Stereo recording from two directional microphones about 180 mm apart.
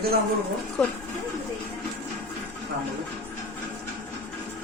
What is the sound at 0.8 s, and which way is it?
Humming, 5° left (ahead or behind).